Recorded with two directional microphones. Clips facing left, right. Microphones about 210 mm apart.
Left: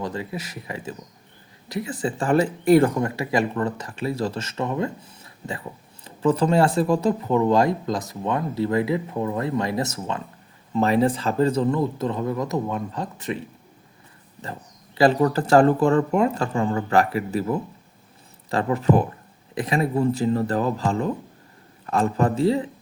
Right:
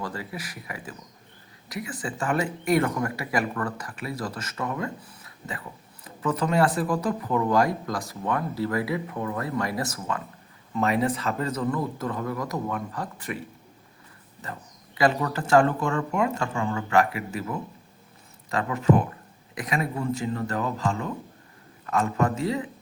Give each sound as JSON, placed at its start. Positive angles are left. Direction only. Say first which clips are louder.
{"t": 0.0, "sound": "speech", "louder": "left 5 dB", "side_deg": 20}
{"t": 14.9, "sound": "speech", "louder": "left 6 dB", "side_deg": 35}